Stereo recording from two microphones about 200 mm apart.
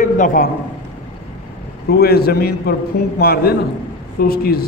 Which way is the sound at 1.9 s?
50° left (ahead or behind).